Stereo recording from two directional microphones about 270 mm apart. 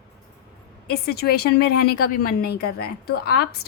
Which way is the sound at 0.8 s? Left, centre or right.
Left.